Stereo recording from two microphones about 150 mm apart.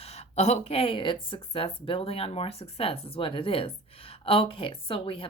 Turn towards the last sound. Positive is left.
turn(degrees=35)  # may be behind; listen again after turning